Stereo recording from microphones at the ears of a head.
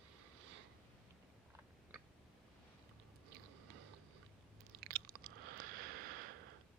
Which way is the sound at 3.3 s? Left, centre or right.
Right.